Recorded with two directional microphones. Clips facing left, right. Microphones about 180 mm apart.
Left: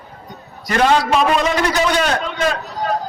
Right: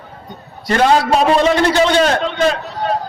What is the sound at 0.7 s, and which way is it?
A man's voice, 35° right (ahead or behind).